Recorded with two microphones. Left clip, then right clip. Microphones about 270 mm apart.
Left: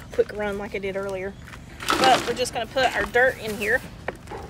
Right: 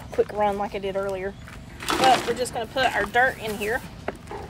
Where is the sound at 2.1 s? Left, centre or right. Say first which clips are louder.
Right 1 dB; centre.